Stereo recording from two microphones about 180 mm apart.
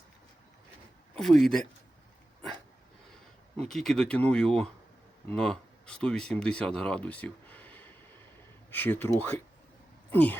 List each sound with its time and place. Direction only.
1.1 s speech: centre (ahead or behind)
3.6 s speech: centre (ahead or behind)